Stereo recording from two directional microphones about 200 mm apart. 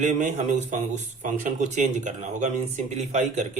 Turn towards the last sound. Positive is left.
turn(degrees=-35)  # may be behind; listen again after turning